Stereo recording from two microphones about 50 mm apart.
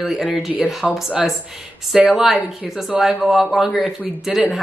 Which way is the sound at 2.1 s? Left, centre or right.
Centre.